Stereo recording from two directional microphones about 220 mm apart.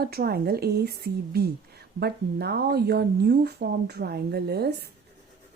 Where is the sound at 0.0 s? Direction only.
45° right (ahead or behind).